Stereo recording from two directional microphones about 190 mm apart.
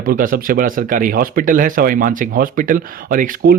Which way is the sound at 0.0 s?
45° right (ahead or behind).